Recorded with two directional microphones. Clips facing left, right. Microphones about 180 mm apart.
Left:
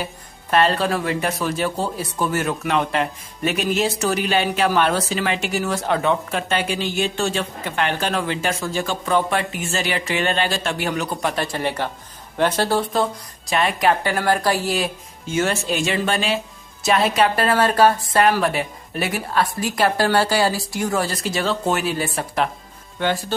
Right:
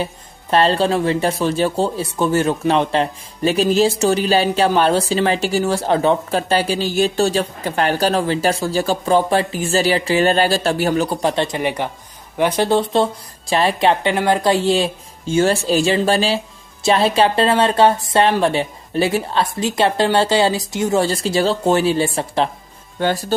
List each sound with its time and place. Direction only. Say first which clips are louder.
0.0 s a woman's voice: right 5 dB; 30° right (ahead or behind)